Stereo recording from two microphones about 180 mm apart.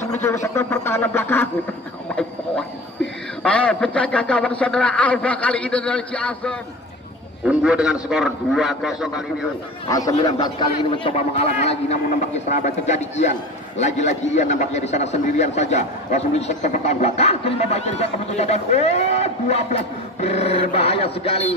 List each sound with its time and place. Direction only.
0.2 s a man's voice: 15° left (ahead or behind)
3.4 s a man's voice: 5° left (ahead or behind)
7.4 s a man's voice: 5° right (ahead or behind)
9.8 s a man's voice: 20° left (ahead or behind); by 21.5 s 35° left (ahead or behind)